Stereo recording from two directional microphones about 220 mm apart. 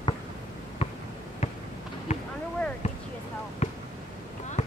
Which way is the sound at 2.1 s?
30° left (ahead or behind).